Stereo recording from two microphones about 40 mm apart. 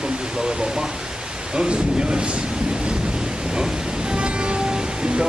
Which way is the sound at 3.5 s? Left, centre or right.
Centre.